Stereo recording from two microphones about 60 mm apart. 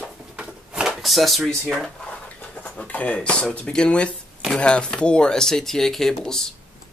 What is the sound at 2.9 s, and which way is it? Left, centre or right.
Speech, left.